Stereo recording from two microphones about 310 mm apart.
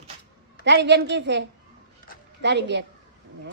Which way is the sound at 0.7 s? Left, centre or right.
Right.